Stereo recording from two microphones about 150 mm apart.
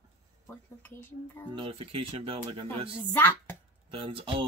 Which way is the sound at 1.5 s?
35° right (ahead or behind).